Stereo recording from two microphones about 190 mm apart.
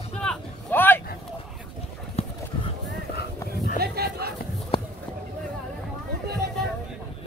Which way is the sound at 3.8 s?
55° right (ahead or behind).